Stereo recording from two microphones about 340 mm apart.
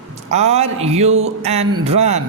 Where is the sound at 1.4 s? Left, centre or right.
Centre.